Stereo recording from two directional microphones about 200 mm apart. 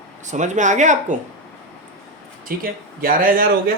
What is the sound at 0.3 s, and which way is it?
Speech, 35° right (ahead or behind).